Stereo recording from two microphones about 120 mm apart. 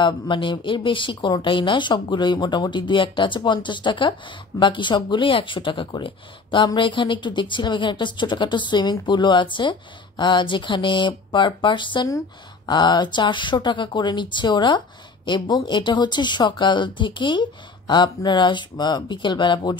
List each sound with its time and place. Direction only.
0.0 s speech: 40° left (ahead or behind)